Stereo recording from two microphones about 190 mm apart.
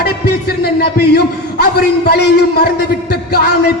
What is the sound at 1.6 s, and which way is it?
A man's voice, 55° left (ahead or behind).